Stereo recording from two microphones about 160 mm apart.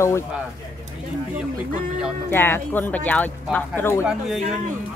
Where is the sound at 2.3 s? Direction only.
15° left (ahead or behind).